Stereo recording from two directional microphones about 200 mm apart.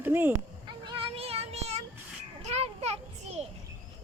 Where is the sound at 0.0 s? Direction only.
10° right (ahead or behind).